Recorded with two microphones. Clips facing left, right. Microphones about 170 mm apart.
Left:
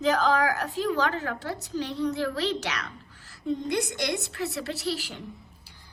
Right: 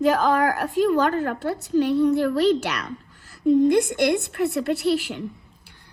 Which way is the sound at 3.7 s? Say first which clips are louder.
Right 9 dB; 55° right (ahead or behind).